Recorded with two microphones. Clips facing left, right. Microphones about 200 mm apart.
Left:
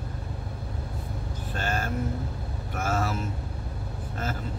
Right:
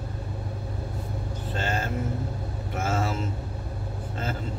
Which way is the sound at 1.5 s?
25° right (ahead or behind).